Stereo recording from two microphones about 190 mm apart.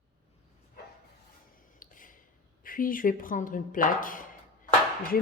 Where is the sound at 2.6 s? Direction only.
45° left (ahead or behind).